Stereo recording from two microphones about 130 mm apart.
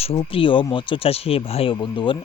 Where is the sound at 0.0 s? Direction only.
45° left (ahead or behind).